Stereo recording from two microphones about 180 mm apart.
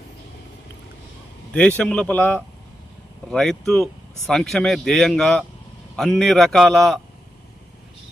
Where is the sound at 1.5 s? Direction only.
5° left (ahead or behind).